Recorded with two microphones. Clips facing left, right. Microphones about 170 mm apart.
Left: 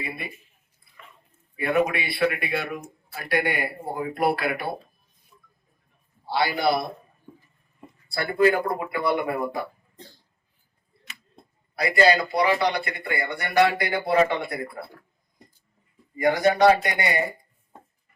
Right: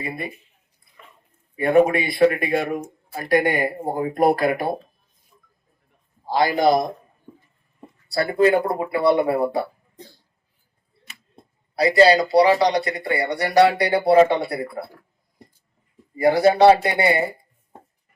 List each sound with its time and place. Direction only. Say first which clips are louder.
0.0 s speech: right 5 dB; 45° right (ahead or behind)
1.5 s speech: right 7 dB; 45° right (ahead or behind)
6.2 s speech: right 5 dB; 45° right (ahead or behind)
8.0 s speech: right 3 dB; 35° right (ahead or behind)
11.7 s speech: right 5 dB; 35° right (ahead or behind)
16.1 s speech: right 5 dB; 35° right (ahead or behind)